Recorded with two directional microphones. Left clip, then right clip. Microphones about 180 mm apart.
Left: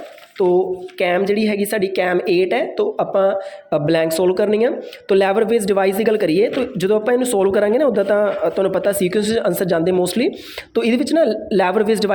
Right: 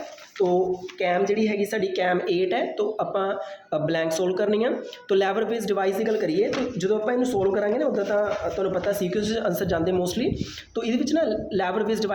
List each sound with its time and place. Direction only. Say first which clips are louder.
0.4 s a woman's voice: left 6 dB; 50° left (ahead or behind)